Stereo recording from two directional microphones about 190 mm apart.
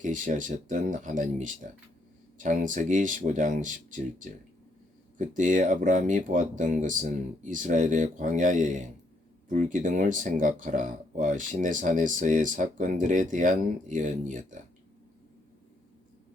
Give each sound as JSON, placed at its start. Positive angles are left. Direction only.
{"t": 0.0, "sound": "speech", "side_deg": -40}